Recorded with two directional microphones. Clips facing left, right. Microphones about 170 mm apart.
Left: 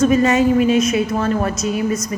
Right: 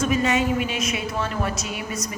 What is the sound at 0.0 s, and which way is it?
A woman's voice, 40° left (ahead or behind).